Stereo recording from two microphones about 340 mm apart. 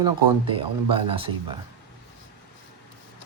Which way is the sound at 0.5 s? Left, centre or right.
Centre.